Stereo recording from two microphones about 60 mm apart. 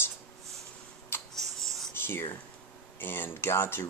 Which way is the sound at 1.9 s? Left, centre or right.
Left.